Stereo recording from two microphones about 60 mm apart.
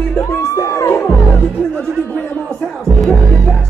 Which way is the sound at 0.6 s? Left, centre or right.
Left.